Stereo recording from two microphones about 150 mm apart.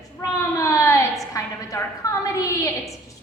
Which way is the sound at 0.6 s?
20° left (ahead or behind).